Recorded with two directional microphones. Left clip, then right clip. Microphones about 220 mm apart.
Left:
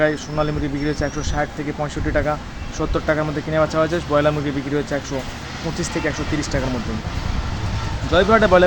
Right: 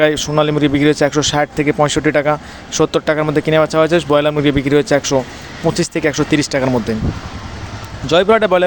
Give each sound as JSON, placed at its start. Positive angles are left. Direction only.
{"t": 0.0, "sound": "speech", "side_deg": -40}
{"t": 8.1, "sound": "speech", "side_deg": -35}